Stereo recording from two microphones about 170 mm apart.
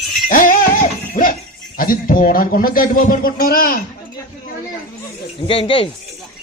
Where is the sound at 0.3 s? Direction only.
55° left (ahead or behind).